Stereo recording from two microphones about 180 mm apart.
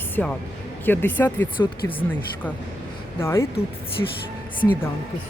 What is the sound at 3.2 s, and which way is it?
Speech, 15° left (ahead or behind).